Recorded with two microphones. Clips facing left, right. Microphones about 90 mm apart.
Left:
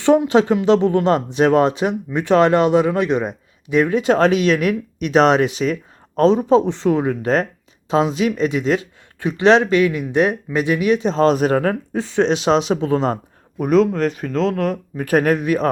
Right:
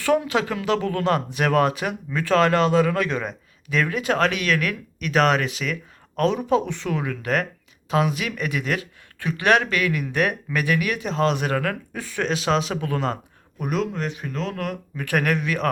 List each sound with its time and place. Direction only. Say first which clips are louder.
0.3 s speech: left 9 dB; 30° left (ahead or behind)
13.6 s speech: left 10 dB; 40° left (ahead or behind)